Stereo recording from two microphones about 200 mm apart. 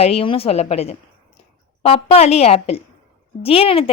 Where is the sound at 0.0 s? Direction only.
30° left (ahead or behind).